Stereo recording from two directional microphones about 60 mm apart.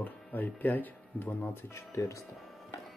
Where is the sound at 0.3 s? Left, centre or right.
Left.